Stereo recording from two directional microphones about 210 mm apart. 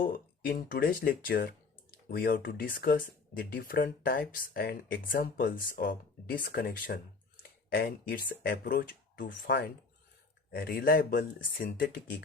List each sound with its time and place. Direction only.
0.0 s speech: 45° left (ahead or behind)
10.5 s speech: 45° left (ahead or behind)